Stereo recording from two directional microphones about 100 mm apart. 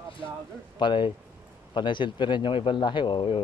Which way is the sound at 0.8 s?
50° left (ahead or behind).